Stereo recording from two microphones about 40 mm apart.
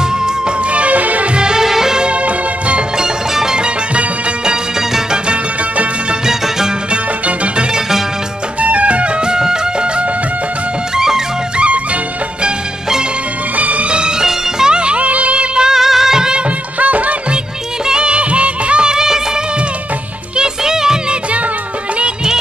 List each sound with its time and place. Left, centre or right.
0.7 s music: right
1.3 s music: centre
2.0 s music: right
3.0 s music: centre
6.2 s music: centre
6.9 s music: right
11.0 s music: centre
11.5 s music: right
13.6 s music: right
15.5 s music: centre
16.8 s music: right
17.8 s music: right
20.3 s music: centre